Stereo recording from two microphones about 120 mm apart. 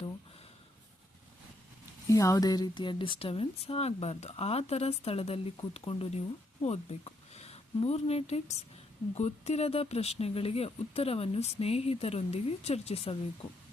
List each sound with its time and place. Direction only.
2.0 s speech: 25° left (ahead or behind); by 13.1 s 60° left (ahead or behind)